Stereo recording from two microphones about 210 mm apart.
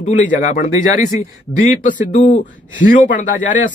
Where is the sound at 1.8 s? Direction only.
40° left (ahead or behind).